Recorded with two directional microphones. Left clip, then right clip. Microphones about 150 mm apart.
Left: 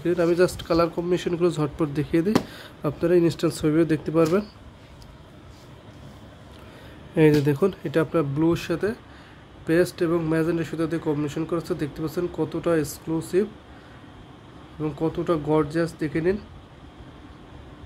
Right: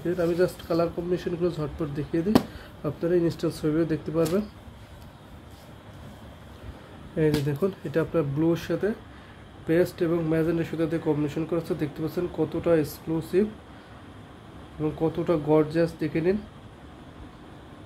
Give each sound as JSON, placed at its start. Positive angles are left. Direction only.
{"t": 0.0, "sound": "a man's voice", "side_deg": 35}
{"t": 7.2, "sound": "speech", "side_deg": 35}
{"t": 14.8, "sound": "speech", "side_deg": 15}